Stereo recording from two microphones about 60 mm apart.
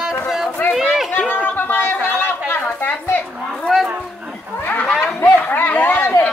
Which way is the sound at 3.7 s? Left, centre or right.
Centre.